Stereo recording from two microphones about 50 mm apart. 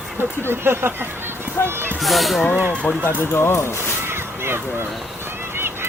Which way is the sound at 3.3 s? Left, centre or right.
Left.